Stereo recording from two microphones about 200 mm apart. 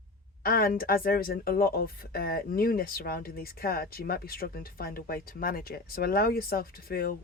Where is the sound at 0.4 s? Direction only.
50° left (ahead or behind).